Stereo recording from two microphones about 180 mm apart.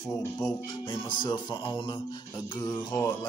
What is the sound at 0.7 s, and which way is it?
Speech, 25° left (ahead or behind).